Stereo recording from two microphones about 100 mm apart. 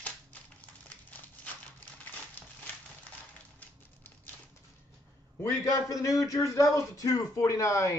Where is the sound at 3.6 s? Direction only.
15° left (ahead or behind).